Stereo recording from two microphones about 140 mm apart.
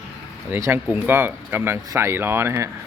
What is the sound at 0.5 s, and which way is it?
Speech, 15° right (ahead or behind).